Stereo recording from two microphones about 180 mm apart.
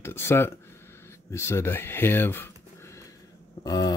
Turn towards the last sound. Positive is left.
turn(degrees=20)  # may be behind; listen again after turning